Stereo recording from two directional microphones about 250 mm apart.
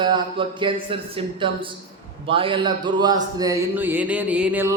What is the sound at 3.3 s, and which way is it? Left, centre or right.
Music, centre.